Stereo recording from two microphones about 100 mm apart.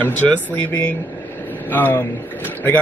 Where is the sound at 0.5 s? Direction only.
20° left (ahead or behind).